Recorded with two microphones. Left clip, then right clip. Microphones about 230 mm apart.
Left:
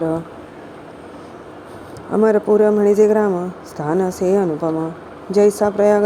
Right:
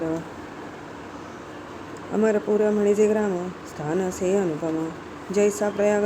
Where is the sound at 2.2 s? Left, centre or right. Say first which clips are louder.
Left 8 dB; left.